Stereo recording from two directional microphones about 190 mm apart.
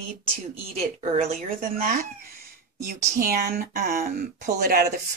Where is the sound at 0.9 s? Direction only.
45° right (ahead or behind).